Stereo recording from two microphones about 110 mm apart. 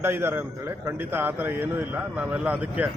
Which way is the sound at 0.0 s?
20° right (ahead or behind).